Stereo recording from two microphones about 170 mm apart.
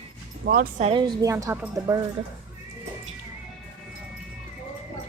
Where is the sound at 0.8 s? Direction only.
35° right (ahead or behind).